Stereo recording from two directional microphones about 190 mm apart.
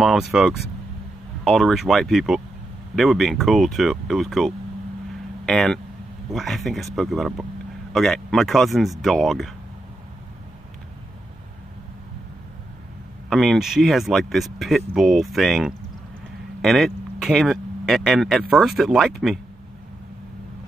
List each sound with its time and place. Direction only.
0.0 s speech: centre (ahead or behind)
13.3 s speech: centre (ahead or behind)